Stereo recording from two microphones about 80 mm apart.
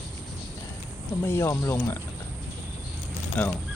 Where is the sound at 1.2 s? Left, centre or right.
Left.